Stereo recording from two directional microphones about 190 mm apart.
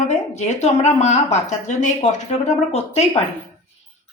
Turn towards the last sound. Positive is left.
turn(degrees=35)  # may be behind; listen again after turning